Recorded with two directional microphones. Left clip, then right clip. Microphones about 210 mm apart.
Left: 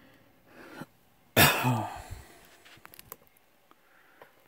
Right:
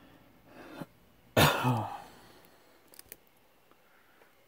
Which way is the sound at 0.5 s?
40° left (ahead or behind).